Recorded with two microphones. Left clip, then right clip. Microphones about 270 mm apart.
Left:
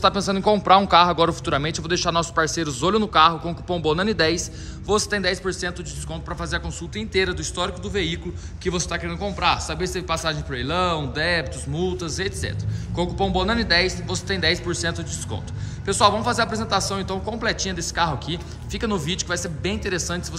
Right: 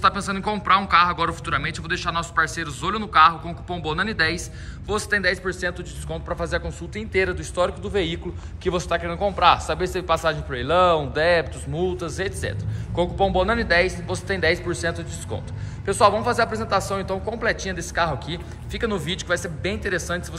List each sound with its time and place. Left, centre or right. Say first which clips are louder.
0.0 s a man's voice: left 2 dB; centre